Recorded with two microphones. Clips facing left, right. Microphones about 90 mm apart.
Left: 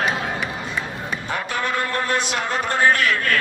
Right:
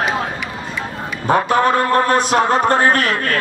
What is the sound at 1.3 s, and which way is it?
Speech, 45° right (ahead or behind).